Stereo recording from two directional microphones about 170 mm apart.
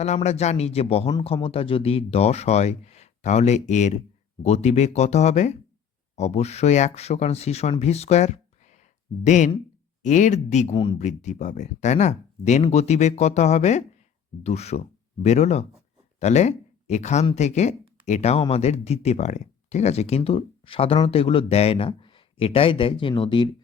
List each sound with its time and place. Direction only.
0.0 s speech: 40° left (ahead or behind)